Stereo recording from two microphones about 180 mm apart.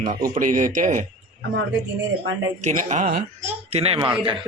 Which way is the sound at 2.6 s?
40° right (ahead or behind).